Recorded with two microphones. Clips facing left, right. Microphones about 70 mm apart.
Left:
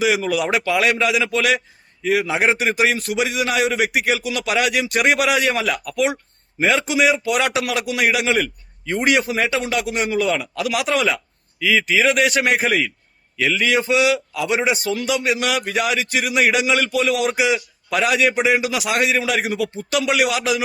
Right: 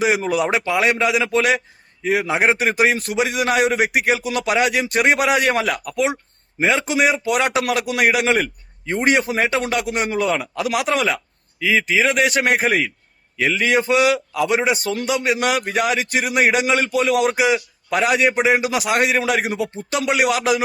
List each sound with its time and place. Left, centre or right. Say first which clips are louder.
0.0 s a man's voice: right 1 dB; right